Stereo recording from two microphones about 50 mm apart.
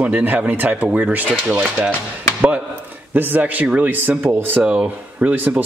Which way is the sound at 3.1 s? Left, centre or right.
Right.